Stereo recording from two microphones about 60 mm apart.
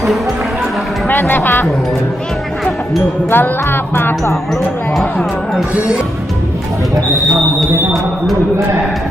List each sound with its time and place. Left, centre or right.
1.0 s music: left
3.2 s music: left